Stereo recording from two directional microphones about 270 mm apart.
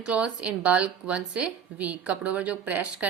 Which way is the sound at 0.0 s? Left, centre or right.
Centre.